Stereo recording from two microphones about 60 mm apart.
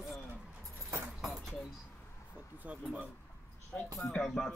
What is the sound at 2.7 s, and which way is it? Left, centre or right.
Speech, right.